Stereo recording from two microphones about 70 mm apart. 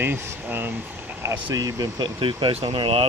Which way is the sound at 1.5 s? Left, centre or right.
Right.